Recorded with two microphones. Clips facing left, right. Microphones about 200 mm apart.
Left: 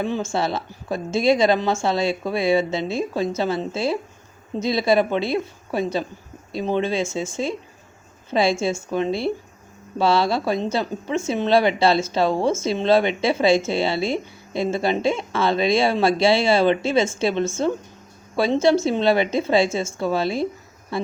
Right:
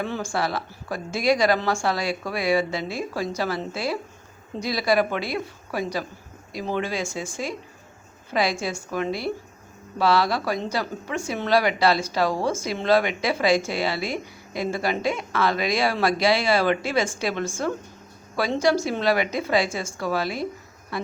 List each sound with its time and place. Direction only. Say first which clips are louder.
0.0 s a woman's voice: left 3 dB; 20° left (ahead or behind)